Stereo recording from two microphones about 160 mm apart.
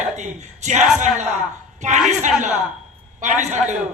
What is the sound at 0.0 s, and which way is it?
A man's voice, 50° right (ahead or behind).